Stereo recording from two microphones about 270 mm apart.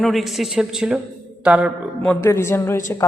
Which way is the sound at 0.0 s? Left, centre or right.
Centre.